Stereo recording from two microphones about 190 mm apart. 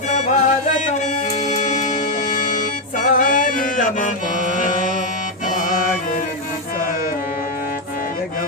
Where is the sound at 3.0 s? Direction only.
45° left (ahead or behind).